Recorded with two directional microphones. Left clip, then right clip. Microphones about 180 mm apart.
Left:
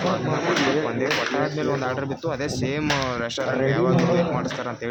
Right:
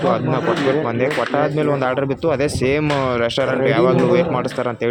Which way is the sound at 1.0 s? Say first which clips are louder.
Right 5 dB; 35° right (ahead or behind).